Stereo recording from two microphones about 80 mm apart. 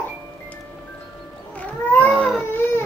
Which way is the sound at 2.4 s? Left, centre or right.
Left.